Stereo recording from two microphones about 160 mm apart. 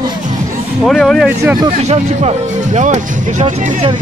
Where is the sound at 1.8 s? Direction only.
45° right (ahead or behind).